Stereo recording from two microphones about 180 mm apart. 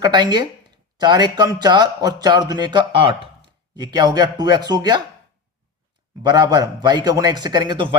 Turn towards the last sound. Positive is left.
turn(degrees=-25)  # may be behind; listen again after turning